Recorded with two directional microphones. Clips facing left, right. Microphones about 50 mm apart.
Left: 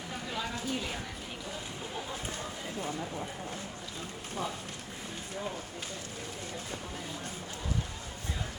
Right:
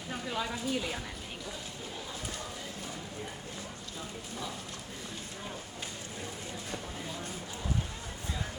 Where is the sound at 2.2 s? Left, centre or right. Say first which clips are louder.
Left 2 dB; left.